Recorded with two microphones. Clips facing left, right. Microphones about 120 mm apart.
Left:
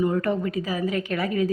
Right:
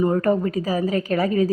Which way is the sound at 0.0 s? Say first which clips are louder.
Right 4 dB; 40° right (ahead or behind).